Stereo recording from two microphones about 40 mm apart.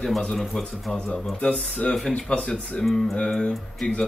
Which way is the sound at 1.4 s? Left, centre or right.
Left.